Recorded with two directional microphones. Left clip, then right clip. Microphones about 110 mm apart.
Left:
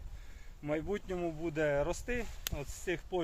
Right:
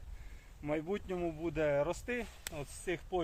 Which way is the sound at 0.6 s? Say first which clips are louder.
Left 1 dB; 15° right (ahead or behind).